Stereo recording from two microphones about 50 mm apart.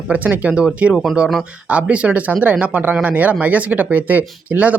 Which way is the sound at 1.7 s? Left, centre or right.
Right.